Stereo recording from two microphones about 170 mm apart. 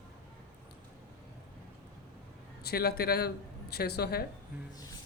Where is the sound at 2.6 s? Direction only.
70° left (ahead or behind).